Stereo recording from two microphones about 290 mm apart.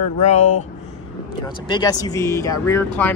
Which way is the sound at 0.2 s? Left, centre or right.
Left.